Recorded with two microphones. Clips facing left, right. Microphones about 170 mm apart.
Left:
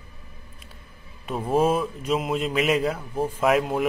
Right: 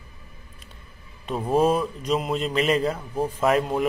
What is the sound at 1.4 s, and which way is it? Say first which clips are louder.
A man's voice: right 1 dB; centre (ahead or behind).